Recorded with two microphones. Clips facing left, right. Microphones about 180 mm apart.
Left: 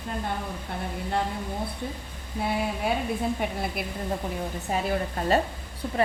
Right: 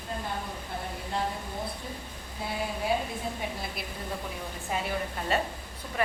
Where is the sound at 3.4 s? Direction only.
60° left (ahead or behind).